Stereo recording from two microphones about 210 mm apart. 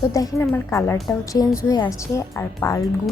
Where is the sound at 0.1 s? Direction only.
15° left (ahead or behind).